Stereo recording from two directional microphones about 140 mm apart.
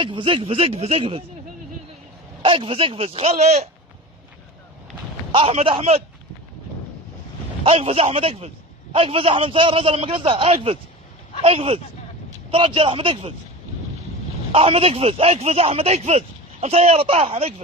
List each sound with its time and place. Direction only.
0.0 s speech: 35° right (ahead or behind)
2.4 s speech: 40° right (ahead or behind)
5.3 s speech: 45° right (ahead or behind)
7.6 s a man's voice: 45° right (ahead or behind)
14.5 s speech: 40° right (ahead or behind)